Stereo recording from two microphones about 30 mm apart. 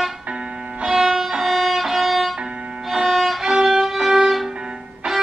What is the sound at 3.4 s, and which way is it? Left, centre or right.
Violin, right.